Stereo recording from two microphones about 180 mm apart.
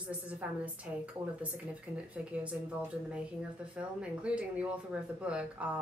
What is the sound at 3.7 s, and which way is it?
A woman's voice, 5° right (ahead or behind).